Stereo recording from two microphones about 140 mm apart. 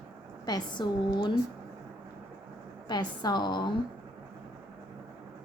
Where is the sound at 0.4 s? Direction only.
30° left (ahead or behind).